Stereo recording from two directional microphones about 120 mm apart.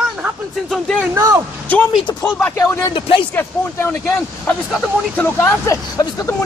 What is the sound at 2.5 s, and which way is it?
Speech, 25° left (ahead or behind).